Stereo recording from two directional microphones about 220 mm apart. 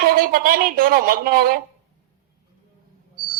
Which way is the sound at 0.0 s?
40° right (ahead or behind).